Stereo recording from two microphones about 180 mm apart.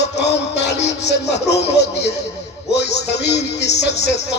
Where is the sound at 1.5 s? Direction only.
65° left (ahead or behind).